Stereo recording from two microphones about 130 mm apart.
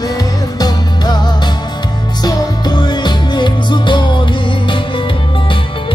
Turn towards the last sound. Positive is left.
turn(degrees=35)  # may be behind; listen again after turning